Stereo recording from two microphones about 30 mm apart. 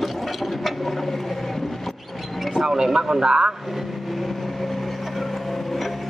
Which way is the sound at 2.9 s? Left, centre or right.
Right.